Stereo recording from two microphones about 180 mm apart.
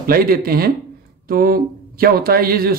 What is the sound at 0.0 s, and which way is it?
Speech, 55° right (ahead or behind).